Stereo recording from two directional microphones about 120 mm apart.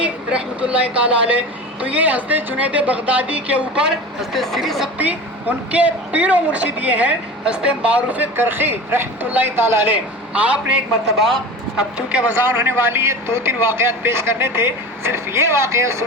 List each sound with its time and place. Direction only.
0.0 s speech: 10° right (ahead or behind)
4.9 s speech: 15° right (ahead or behind)
11.8 s speech: 10° right (ahead or behind); by 16.0 s 25° right (ahead or behind)